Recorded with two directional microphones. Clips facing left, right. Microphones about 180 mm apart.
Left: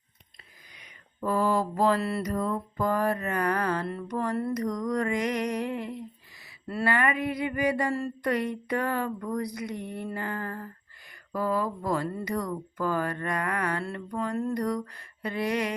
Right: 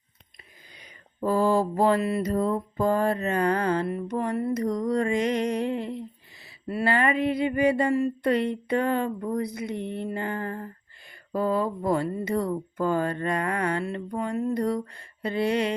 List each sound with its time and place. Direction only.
0.8 s mantra: 30° right (ahead or behind)